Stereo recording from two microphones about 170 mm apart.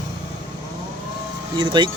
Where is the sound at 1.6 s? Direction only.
25° right (ahead or behind).